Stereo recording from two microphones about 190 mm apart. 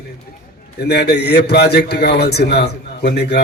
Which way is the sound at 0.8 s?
60° left (ahead or behind).